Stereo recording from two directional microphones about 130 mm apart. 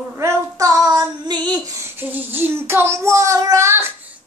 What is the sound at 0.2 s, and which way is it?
Child singing, 30° right (ahead or behind).